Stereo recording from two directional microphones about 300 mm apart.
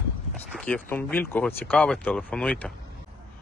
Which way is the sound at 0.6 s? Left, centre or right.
Centre.